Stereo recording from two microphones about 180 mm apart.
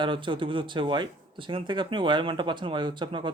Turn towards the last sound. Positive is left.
turn(degrees=-25)  # may be behind; listen again after turning